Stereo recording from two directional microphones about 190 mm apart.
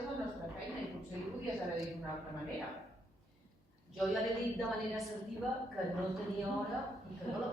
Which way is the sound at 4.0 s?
Centre (ahead or behind).